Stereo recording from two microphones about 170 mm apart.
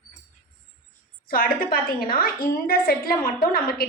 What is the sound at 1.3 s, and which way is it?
A woman's voice, 60° left (ahead or behind).